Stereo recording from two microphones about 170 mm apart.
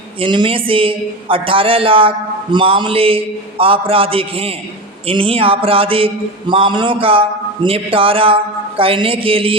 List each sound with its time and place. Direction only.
0.2 s a woman's voice: 30° right (ahead or behind)